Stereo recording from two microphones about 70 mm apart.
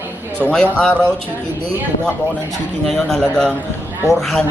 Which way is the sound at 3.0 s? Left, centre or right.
Centre.